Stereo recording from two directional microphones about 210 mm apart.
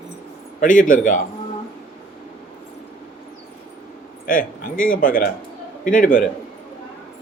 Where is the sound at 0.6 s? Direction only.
40° left (ahead or behind).